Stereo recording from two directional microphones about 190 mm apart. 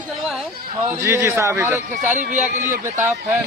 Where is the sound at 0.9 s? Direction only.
15° right (ahead or behind).